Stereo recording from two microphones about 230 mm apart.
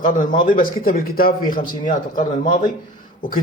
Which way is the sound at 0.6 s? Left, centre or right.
Left.